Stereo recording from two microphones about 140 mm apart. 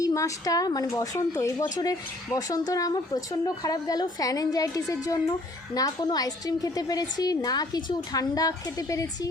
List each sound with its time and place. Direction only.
0.0 s speech: 25° left (ahead or behind)